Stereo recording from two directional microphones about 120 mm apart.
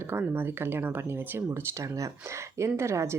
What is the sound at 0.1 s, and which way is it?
Speech, 20° right (ahead or behind).